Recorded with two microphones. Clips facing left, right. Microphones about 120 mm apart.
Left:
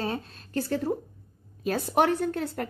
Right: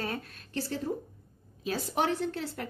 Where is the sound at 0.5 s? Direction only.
55° left (ahead or behind).